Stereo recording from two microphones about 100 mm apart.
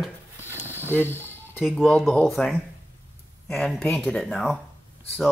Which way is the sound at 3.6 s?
5° left (ahead or behind).